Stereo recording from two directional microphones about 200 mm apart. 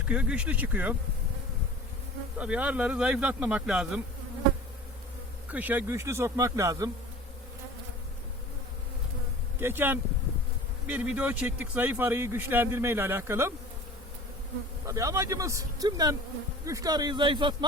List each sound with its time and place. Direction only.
0.1 s a man's voice: 5° right (ahead or behind)
2.4 s speech: 5° right (ahead or behind)
5.5 s a man's voice: 10° right (ahead or behind)
9.6 s a man's voice: 10° right (ahead or behind)
14.8 s a man's voice: 15° right (ahead or behind)